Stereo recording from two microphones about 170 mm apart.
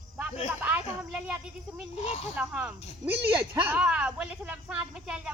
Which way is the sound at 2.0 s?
40° left (ahead or behind).